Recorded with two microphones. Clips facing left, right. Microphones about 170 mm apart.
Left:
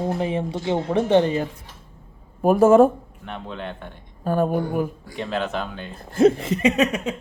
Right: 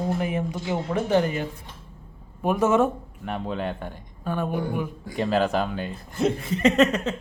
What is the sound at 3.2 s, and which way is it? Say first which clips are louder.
Speech: right 4 dB; 5° right (ahead or behind).